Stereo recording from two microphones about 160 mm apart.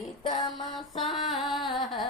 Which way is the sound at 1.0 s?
Centre (ahead or behind).